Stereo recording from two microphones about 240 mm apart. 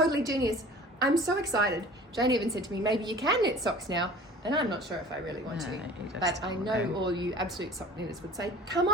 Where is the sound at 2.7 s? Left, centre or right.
Centre.